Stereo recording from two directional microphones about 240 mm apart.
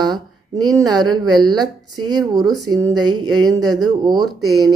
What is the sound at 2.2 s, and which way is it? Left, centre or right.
Speech, centre.